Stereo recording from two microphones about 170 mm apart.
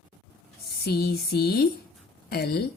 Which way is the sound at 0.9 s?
65° left (ahead or behind).